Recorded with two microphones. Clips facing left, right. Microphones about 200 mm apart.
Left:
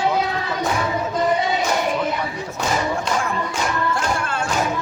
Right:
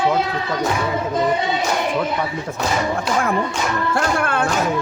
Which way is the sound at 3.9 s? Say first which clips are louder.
Right 4 dB; 60° right (ahead or behind).